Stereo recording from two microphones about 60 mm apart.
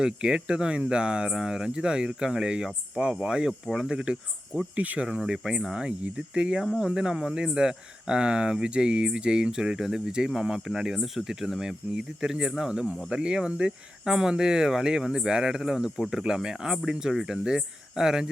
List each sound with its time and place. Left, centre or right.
0.0 s speech: centre
4.7 s speech: right